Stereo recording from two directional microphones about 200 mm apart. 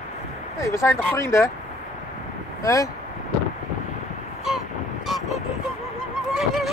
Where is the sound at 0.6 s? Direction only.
15° left (ahead or behind).